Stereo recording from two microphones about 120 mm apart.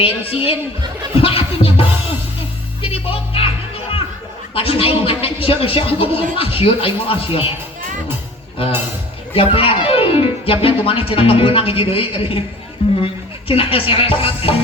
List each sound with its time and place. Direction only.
0.0 s speech: 50° left (ahead or behind)
2.8 s speech: 50° left (ahead or behind)
4.5 s speech: 50° left (ahead or behind)
9.3 s speech: 50° left (ahead or behind)
13.5 s speech: 50° left (ahead or behind)